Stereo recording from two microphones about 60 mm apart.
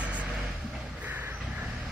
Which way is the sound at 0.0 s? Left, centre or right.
Right.